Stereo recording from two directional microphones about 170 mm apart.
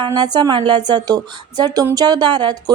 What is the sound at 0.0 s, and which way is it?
A woman's voice, 25° right (ahead or behind).